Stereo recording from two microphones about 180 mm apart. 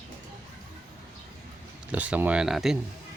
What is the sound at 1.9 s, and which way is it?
Speech, 10° right (ahead or behind).